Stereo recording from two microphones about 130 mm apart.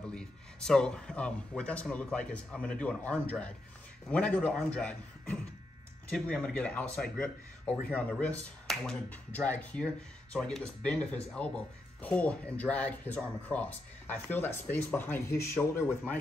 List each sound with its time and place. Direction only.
0.0 s speech: 5° left (ahead or behind)